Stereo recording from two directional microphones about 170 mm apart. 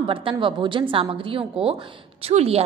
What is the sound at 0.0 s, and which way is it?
A woman's voice, 30° right (ahead or behind).